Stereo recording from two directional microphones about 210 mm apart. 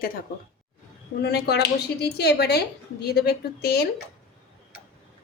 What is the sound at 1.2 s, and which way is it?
Speech, 50° left (ahead or behind).